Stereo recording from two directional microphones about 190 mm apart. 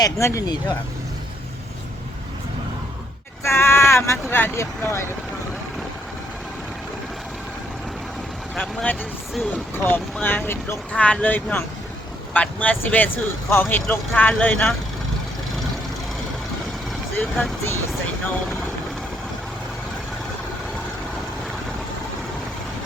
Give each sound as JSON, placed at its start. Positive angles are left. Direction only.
{"t": 0.0, "sound": "speech", "side_deg": 15}
{"t": 3.4, "sound": "speech", "side_deg": 15}
{"t": 8.5, "sound": "speech", "side_deg": 5}
{"t": 17.2, "sound": "speech", "side_deg": 10}